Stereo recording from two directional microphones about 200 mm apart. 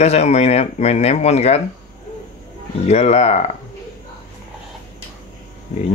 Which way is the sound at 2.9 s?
30° left (ahead or behind).